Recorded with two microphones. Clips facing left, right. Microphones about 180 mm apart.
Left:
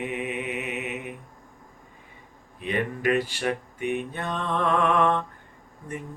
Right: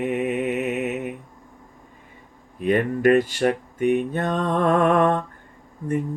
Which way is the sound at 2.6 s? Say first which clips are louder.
Right 7 dB; 45° right (ahead or behind).